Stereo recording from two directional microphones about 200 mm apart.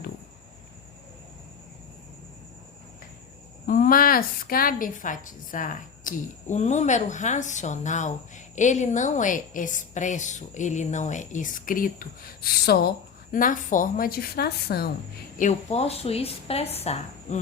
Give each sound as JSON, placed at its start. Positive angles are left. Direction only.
{"t": 3.7, "sound": "a woman's voice", "side_deg": 45}
{"t": 15.4, "sound": "a woman's voice", "side_deg": 35}